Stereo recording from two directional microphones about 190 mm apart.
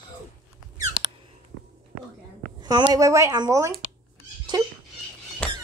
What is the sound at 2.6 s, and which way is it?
A woman's voice, 20° right (ahead or behind).